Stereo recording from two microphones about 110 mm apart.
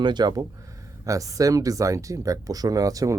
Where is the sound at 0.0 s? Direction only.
40° right (ahead or behind).